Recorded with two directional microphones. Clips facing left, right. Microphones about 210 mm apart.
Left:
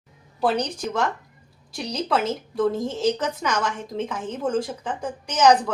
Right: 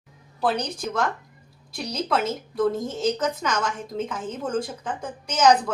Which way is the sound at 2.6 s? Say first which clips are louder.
Left 1 dB; centre (ahead or behind).